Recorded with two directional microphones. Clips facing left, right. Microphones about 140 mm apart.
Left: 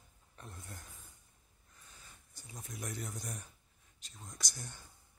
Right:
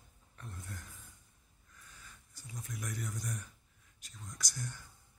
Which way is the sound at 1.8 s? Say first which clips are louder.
Right 1 dB; 25° left (ahead or behind).